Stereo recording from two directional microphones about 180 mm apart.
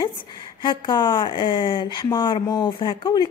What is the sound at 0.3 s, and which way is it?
A woman's voice, 25° left (ahead or behind).